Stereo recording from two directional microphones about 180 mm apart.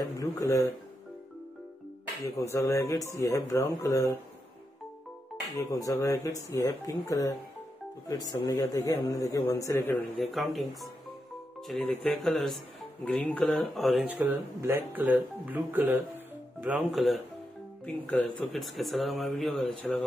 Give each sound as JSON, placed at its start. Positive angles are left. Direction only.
{"t": 0.0, "sound": "speech", "side_deg": 15}
{"t": 2.3, "sound": "speech", "side_deg": 15}
{"t": 5.5, "sound": "speech", "side_deg": 20}
{"t": 10.1, "sound": "speech", "side_deg": 0}